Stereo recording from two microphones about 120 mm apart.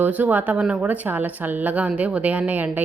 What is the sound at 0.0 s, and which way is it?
A woman's voice, 15° right (ahead or behind).